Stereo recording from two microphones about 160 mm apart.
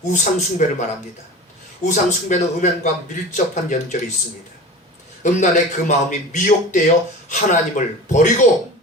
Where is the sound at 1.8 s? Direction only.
50° left (ahead or behind).